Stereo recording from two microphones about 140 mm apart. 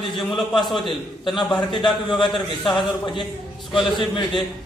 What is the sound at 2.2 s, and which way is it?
Speech, centre (ahead or behind).